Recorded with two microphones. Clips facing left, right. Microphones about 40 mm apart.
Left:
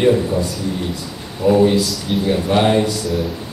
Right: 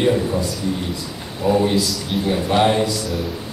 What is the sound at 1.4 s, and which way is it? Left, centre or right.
Speech, centre.